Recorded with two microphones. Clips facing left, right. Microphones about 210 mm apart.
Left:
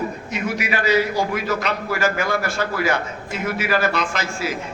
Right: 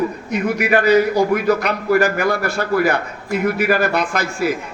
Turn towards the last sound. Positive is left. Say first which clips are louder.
# right 4 dB
turn(degrees=-55)  # may be behind; listen again after turning